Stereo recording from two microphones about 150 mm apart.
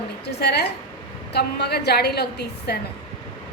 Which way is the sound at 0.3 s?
90° left.